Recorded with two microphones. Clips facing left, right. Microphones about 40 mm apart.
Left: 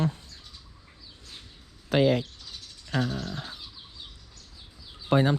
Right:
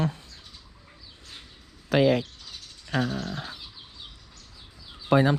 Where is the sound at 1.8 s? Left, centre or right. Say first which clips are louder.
Right 1 dB; right.